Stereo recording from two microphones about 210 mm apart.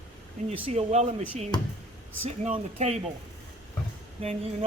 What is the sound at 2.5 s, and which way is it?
Speech, 30° right (ahead or behind).